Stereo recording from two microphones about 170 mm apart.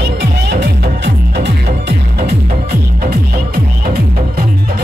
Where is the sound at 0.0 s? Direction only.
85° right.